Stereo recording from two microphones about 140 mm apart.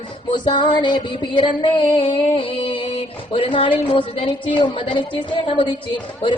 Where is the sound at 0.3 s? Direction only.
35° left (ahead or behind).